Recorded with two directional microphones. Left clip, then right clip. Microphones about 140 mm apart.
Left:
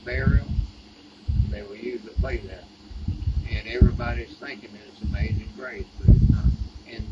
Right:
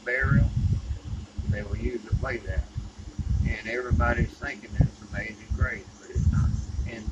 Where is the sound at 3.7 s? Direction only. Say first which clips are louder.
Right 1 dB; 5° left (ahead or behind).